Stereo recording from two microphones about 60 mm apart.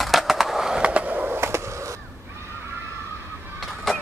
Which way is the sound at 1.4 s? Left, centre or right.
Right.